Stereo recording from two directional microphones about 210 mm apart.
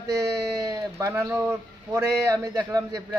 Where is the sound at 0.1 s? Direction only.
15° right (ahead or behind).